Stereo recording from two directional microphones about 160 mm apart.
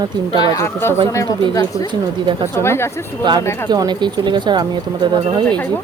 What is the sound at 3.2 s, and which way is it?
Speech, 30° right (ahead or behind).